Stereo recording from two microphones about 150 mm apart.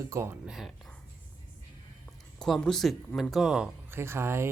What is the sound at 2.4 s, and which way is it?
Speech, 5° left (ahead or behind).